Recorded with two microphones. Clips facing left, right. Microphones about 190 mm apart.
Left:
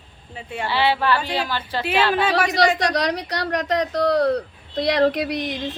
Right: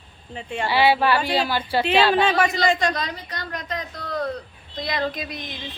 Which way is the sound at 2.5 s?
75° left (ahead or behind).